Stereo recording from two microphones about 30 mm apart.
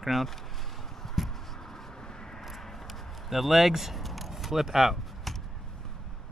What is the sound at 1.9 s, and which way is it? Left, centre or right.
Vehicle, left.